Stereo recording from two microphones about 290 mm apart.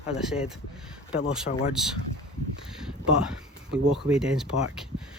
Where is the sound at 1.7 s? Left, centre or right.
Centre.